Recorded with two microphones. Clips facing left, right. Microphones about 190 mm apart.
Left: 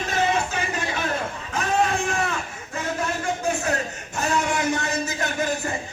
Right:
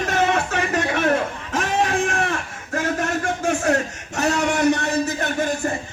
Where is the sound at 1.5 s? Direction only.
90° right.